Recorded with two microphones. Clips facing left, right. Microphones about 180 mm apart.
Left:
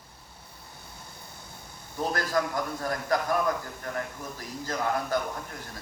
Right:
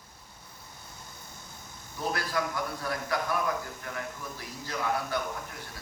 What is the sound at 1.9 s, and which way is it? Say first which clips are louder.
A man's voice: left 4 dB; 45° left (ahead or behind).